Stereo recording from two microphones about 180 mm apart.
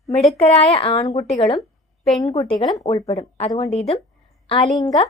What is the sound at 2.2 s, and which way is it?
Speech, 20° left (ahead or behind).